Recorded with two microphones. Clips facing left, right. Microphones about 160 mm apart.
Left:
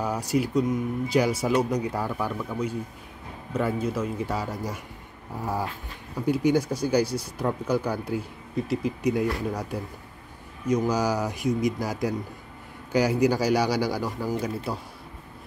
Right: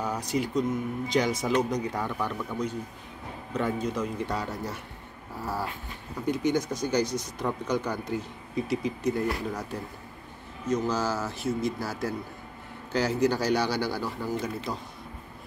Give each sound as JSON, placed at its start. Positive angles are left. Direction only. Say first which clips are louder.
{"t": 0.0, "sound": "speech", "louder": "left 3 dB", "side_deg": 10}
{"t": 9.0, "sound": "speech", "louder": "left 3 dB", "side_deg": 10}